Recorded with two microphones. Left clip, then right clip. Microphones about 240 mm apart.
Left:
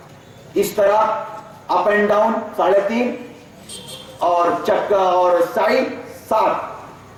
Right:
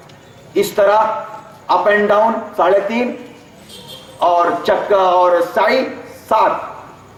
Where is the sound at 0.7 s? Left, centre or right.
Centre.